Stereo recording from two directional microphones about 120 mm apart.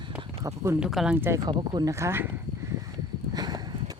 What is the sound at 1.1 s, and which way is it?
Speech, 20° right (ahead or behind).